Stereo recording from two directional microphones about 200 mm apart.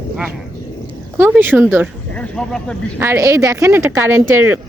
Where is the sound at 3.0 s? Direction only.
15° right (ahead or behind).